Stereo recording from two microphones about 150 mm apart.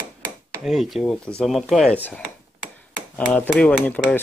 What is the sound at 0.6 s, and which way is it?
Speech, centre (ahead or behind).